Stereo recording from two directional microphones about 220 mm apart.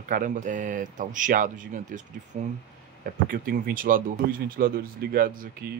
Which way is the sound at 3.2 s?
40° right (ahead or behind).